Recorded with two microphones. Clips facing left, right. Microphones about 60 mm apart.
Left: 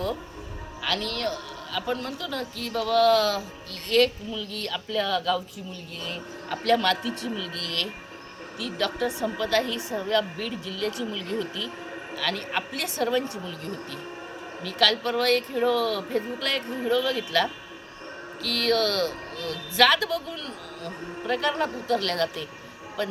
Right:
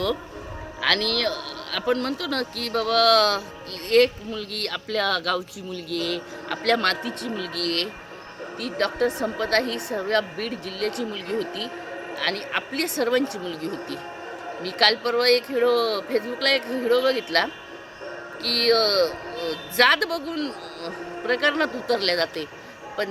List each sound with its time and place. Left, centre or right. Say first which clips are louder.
0.8 s a woman's voice: right 5 dB; right
3.8 s a woman's voice: right 3 dB; right